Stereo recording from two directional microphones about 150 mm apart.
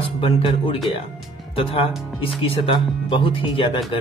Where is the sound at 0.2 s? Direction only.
35° left (ahead or behind).